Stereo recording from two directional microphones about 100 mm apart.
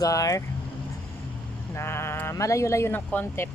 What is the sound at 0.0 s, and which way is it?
Speech, 35° left (ahead or behind).